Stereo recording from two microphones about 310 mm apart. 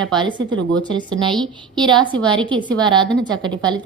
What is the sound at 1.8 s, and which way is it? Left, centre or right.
A woman's voice, centre.